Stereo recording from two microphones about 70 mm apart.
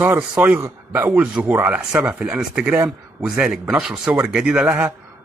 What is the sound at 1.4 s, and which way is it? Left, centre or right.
A man's voice, right.